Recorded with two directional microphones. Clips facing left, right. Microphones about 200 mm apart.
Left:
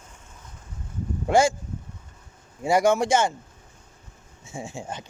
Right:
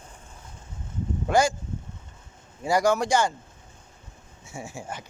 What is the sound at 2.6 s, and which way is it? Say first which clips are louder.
Speech: left 2 dB; 25° left (ahead or behind).